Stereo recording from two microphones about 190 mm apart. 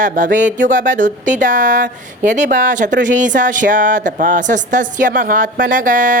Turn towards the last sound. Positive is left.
turn(degrees=-45)  # may be behind; listen again after turning